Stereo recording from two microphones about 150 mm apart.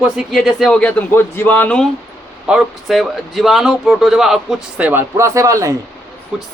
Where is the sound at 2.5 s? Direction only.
5° right (ahead or behind); by 5.7 s 20° right (ahead or behind).